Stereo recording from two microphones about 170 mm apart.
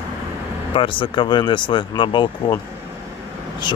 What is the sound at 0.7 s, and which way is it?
Speech, 30° left (ahead or behind).